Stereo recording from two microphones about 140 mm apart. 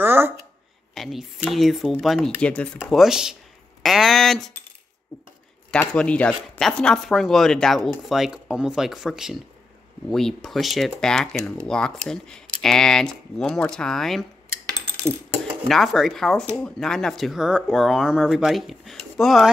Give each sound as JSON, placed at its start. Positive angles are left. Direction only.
{"t": 0.0, "sound": "a sound", "side_deg": -15}
{"t": 0.9, "sound": "speech", "side_deg": 0}
{"t": 2.8, "sound": "speech", "side_deg": -5}
{"t": 5.7, "sound": "speech", "side_deg": 10}
{"t": 15.7, "sound": "speech", "side_deg": 0}